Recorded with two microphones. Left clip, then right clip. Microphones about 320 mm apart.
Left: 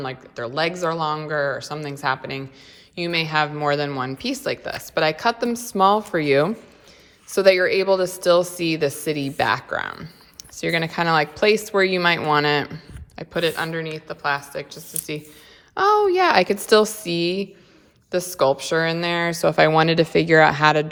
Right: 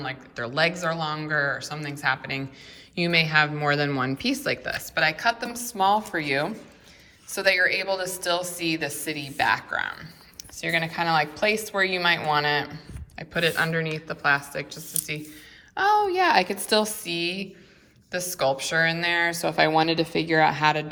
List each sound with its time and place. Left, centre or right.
0.0 s a woman's voice: centre